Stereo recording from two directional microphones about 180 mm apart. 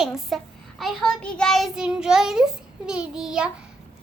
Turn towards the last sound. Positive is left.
turn(degrees=-5)  # may be behind; listen again after turning